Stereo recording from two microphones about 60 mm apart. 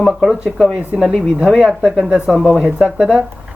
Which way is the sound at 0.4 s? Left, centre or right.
Centre.